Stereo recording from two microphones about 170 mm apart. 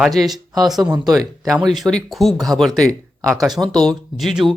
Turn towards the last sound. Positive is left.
turn(degrees=0)  # may be behind; listen again after turning